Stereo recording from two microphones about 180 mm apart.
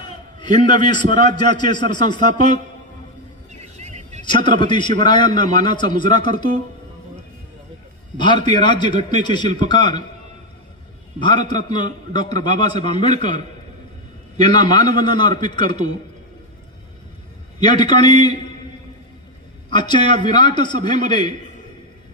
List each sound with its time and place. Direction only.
0.4 s a man's voice: 25° left (ahead or behind)
3.7 s vehicle: 40° right (ahead or behind)
4.2 s a man's voice: 25° left (ahead or behind)
8.2 s a man's voice: 25° left (ahead or behind)
11.1 s a man's voice: 25° left (ahead or behind)
14.4 s a man's voice: 25° left (ahead or behind)
17.6 s a man's voice: 25° left (ahead or behind)
19.7 s a man's voice: 25° left (ahead or behind)